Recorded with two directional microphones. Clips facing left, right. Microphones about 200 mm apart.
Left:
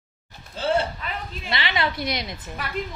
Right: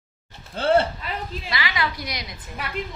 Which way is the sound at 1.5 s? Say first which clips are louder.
Left 2 dB; 25° left (ahead or behind).